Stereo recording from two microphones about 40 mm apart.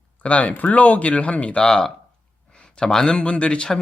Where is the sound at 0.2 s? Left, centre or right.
Left.